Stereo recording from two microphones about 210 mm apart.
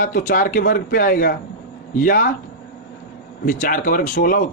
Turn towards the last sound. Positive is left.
turn(degrees=40)  # may be behind; listen again after turning